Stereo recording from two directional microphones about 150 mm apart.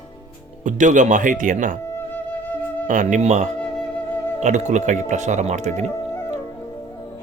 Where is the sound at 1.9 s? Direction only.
10° left (ahead or behind).